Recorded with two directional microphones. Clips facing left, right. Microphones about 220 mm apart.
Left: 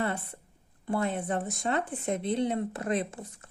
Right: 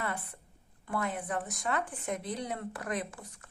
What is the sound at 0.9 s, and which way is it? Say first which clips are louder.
Speech: left 5 dB; 25° left (ahead or behind).